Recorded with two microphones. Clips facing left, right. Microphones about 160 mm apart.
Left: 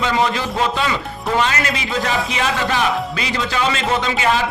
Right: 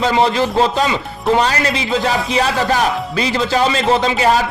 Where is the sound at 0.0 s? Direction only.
35° right (ahead or behind).